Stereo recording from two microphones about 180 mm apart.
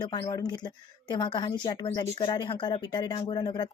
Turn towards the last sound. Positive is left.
turn(degrees=25)  # may be behind; listen again after turning